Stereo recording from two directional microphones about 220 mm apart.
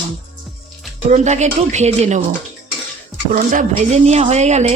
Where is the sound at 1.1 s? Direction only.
30° right (ahead or behind).